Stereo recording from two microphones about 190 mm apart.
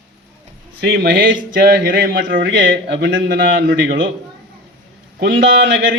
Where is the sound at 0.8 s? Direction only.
55° right (ahead or behind).